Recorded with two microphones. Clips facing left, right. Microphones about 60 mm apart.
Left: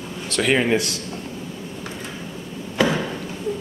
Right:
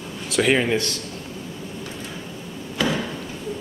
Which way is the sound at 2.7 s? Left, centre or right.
Left.